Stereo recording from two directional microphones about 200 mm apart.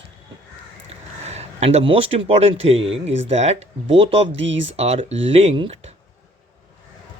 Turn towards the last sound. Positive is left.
turn(degrees=-30)  # may be behind; listen again after turning